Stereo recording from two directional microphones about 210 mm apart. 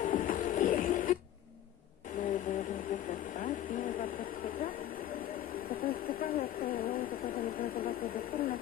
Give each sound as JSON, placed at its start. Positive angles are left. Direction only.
{"t": 0.0, "sound": "music", "side_deg": 45}
{"t": 3.1, "sound": "vehicle", "side_deg": 35}
{"t": 5.7, "sound": "a sound", "side_deg": 45}